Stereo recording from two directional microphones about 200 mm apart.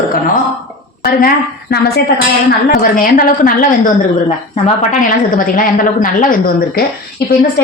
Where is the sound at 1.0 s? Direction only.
50° left (ahead or behind).